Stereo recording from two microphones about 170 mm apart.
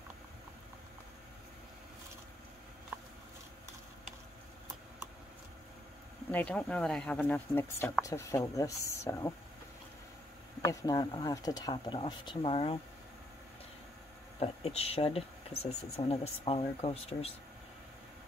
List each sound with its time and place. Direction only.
2.9 s a sound: 15° right (ahead or behind)
6.3 s speech: 5° left (ahead or behind)
10.6 s speech: 20° left (ahead or behind)
14.4 s speech: 40° left (ahead or behind)